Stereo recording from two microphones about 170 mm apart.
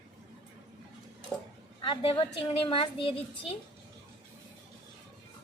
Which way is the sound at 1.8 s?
30° left (ahead or behind).